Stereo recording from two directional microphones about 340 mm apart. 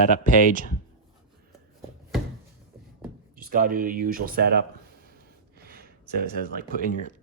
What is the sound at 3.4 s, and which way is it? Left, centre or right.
Speech, right.